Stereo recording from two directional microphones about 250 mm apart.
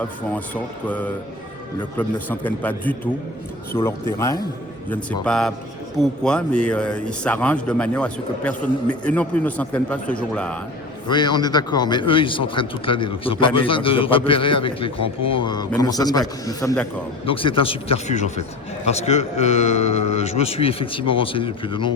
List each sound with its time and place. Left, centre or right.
0.0 s a man's voice: centre
4.9 s a man's voice: centre
11.1 s a man's voice: centre